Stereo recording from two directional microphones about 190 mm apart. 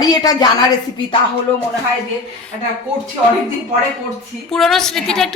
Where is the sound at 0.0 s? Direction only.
20° left (ahead or behind).